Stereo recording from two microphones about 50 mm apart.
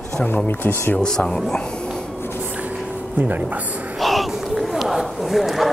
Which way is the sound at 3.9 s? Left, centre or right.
Centre.